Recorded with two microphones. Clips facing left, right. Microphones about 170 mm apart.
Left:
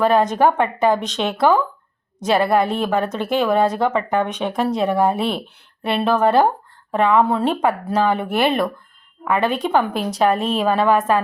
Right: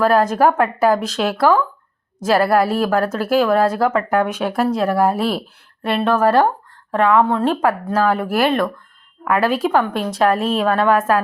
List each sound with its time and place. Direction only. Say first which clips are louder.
0.0 s speech: right 1 dB; centre (ahead or behind)